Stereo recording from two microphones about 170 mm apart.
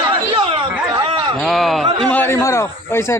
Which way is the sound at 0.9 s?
30° right (ahead or behind).